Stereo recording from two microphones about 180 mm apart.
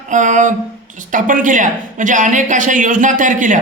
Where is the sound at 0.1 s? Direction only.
45° right (ahead or behind).